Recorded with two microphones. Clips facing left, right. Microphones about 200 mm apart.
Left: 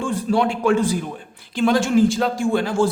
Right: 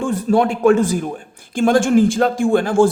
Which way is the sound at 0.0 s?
45° right (ahead or behind).